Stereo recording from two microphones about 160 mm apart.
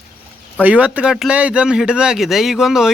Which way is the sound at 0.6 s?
10° right (ahead or behind).